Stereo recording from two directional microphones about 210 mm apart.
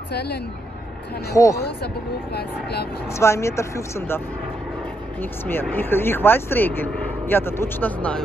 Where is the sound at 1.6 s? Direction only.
50° left (ahead or behind).